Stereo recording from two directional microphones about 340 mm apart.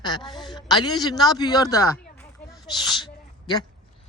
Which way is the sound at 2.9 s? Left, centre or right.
Centre.